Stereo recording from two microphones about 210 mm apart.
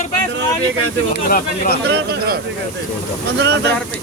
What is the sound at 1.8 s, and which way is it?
Speech, 50° right (ahead or behind).